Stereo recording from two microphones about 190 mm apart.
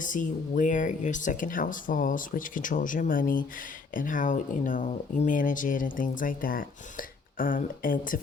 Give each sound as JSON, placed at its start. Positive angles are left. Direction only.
{"t": 0.0, "sound": "speech", "side_deg": 45}